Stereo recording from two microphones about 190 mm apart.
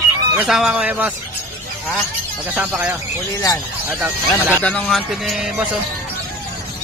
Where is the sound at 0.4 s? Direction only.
5° right (ahead or behind).